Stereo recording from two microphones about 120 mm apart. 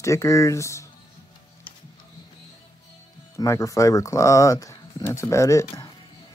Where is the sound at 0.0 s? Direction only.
25° left (ahead or behind).